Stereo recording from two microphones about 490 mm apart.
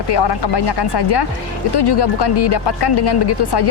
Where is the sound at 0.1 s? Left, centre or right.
Left.